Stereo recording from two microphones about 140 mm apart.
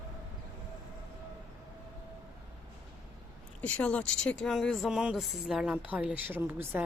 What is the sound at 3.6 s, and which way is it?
A woman's voice, 10° left (ahead or behind).